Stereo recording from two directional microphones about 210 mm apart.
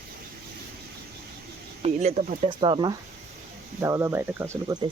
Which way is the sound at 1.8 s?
30° right (ahead or behind).